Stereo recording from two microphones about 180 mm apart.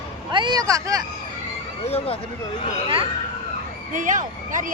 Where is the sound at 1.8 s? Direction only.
35° left (ahead or behind).